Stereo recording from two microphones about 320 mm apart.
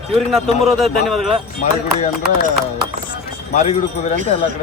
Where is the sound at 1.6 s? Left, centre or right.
Left.